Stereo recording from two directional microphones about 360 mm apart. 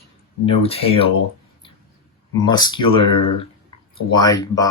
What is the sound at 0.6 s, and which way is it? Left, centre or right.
Speech, centre.